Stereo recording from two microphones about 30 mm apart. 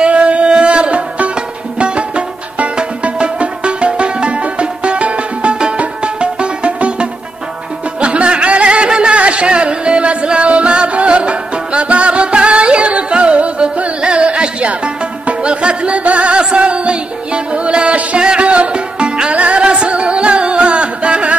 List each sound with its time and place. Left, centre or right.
0.0 s music: right
1.3 s music: right
18.4 s music: right
19.3 s music: right